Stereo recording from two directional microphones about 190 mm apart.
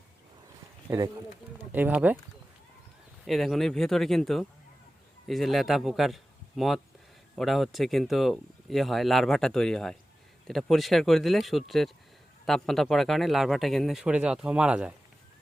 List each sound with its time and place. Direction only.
0.9 s speech: 20° right (ahead or behind)
1.7 s speech: 10° right (ahead or behind)
3.2 s speech: centre (ahead or behind)